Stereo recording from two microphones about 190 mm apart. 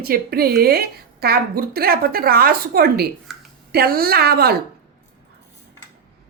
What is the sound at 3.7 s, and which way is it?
Speech, 55° right (ahead or behind).